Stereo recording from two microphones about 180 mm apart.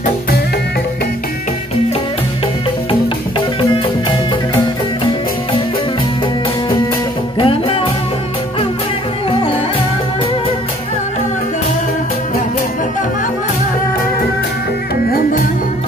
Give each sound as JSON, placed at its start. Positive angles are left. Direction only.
{"t": 7.3, "sound": "music", "side_deg": 30}